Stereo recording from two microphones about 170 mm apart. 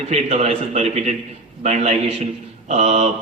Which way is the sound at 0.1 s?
35° right (ahead or behind).